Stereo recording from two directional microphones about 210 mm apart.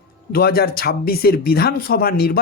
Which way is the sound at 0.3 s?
45° left (ahead or behind).